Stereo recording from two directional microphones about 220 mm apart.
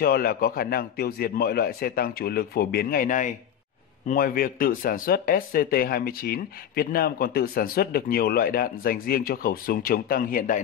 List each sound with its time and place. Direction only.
0.0 s a man's voice: 45° left (ahead or behind)